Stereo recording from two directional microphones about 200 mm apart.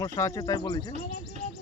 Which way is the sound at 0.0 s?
15° left (ahead or behind).